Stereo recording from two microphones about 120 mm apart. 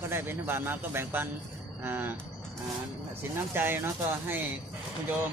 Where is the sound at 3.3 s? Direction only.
20° right (ahead or behind).